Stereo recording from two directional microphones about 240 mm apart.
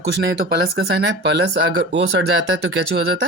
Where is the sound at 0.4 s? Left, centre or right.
Right.